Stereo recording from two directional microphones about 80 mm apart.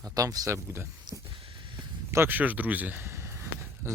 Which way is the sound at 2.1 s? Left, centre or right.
Right.